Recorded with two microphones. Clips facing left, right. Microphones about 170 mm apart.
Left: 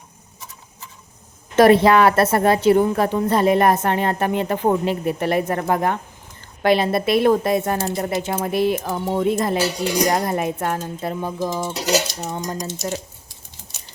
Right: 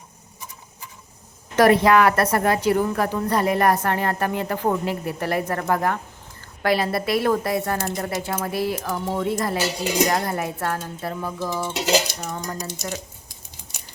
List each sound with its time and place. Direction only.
1.5 s a woman's voice: 25° left (ahead or behind)